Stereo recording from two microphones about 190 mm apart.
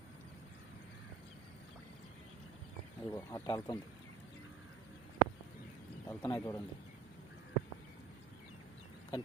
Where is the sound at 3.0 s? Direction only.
20° left (ahead or behind).